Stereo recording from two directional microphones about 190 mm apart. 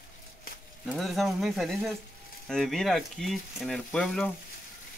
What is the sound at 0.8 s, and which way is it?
Speech, centre (ahead or behind).